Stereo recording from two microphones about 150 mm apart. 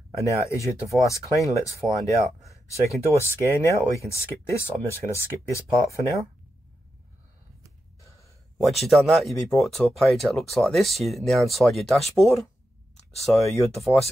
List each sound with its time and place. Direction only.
0.2 s speech: 20° left (ahead or behind)
8.5 s speech: centre (ahead or behind)